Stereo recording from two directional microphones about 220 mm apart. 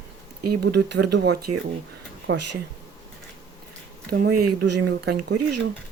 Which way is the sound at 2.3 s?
60° right (ahead or behind).